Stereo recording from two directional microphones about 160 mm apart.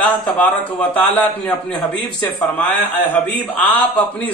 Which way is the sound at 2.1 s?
30° left (ahead or behind).